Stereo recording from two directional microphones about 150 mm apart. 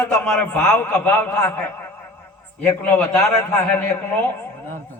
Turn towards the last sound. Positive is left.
turn(degrees=15)  # may be behind; listen again after turning